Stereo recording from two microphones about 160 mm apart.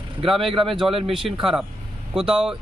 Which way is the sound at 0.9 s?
35° right (ahead or behind).